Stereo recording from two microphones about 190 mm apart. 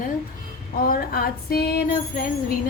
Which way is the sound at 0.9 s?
50° left (ahead or behind).